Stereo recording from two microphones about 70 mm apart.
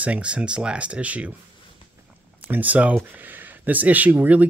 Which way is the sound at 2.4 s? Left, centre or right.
Right.